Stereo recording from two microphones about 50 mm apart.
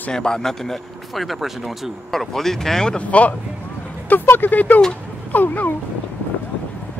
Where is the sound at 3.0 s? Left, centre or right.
Left.